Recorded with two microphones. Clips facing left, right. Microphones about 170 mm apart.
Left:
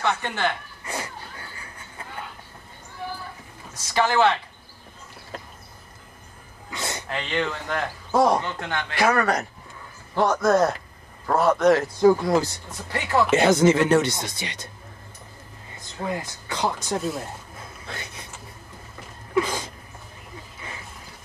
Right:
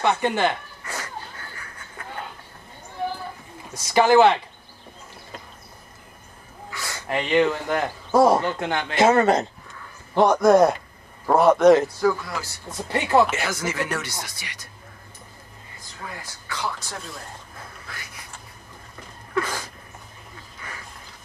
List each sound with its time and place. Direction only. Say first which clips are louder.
0.0 s speech: right 4 dB; 15° right (ahead or behind)
0.8 s a sound: left 2 dB; 20° left (ahead or behind)
3.7 s speech: right 6 dB; 15° right (ahead or behind)
6.7 s a sound: left 4 dB; 20° left (ahead or behind)
7.1 s speech: right 8 dB; 10° right (ahead or behind)
12.0 s speech: left 5 dB; 25° left (ahead or behind)
12.7 s speech: right 4 dB; 20° right (ahead or behind)
13.4 s speech: left 10 dB; 25° left (ahead or behind)
15.8 s speech: left 9 dB; 25° left (ahead or behind)
17.8 s a sound: left 4 dB; 25° left (ahead or behind)
19.3 s a sound: left 3 dB; 20° left (ahead or behind)
20.6 s wild animals: even; 25° left (ahead or behind)